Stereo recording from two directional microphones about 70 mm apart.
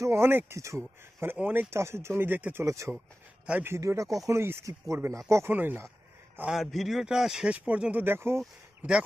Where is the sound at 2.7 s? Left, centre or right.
Right.